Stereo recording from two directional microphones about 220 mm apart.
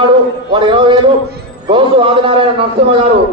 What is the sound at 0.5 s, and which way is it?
A man's voice, 20° right (ahead or behind).